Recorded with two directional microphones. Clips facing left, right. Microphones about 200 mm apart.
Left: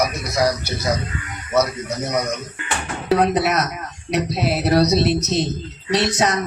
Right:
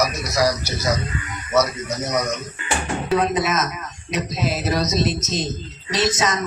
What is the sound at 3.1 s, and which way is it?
A woman's voice, 65° left (ahead or behind).